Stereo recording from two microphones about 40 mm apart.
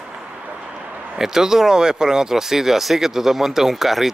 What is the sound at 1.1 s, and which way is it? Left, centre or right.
Speech, centre.